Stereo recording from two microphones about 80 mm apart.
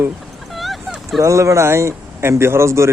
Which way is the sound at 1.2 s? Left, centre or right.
Right.